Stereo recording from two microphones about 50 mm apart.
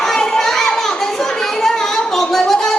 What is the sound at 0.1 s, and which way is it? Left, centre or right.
Children playing, centre.